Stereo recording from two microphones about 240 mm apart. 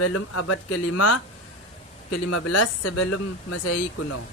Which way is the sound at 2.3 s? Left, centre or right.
Left.